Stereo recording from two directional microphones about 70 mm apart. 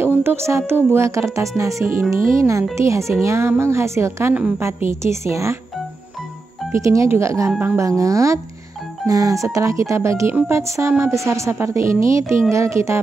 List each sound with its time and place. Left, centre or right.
0.0 s music: right
0.9 s speech: right
6.7 s speech: right
11.2 s speech: right